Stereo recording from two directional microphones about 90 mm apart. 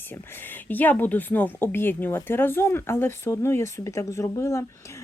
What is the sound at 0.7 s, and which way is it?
Speech, 20° left (ahead or behind).